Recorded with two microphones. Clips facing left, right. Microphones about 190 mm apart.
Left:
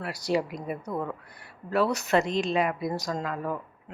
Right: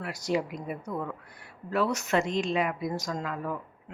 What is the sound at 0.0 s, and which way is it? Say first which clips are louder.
Speech: left 2 dB; 35° left (ahead or behind).